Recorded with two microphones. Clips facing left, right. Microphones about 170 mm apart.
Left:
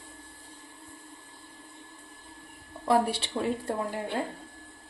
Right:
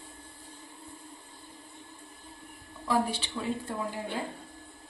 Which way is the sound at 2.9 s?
65° left (ahead or behind).